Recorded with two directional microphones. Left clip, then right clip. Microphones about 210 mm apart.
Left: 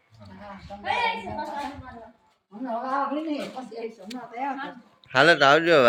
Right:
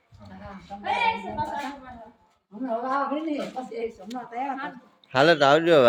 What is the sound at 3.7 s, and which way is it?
A woman's voice, 5° right (ahead or behind).